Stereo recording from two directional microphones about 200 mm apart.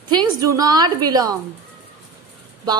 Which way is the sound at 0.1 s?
20° right (ahead or behind).